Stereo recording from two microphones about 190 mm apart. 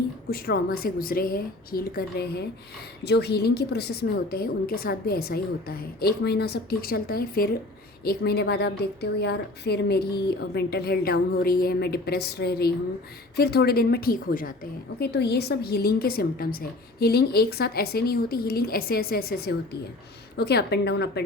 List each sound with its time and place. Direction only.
0.3 s a woman's voice: 50° left (ahead or behind)